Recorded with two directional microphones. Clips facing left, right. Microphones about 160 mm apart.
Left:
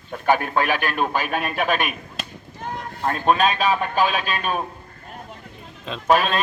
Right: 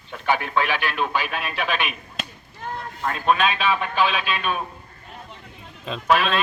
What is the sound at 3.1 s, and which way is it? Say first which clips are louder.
A man's voice: left 2 dB; 40° left (ahead or behind).